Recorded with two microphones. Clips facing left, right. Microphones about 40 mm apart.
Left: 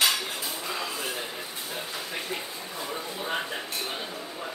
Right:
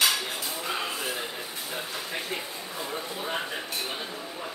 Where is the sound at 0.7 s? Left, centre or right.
Right.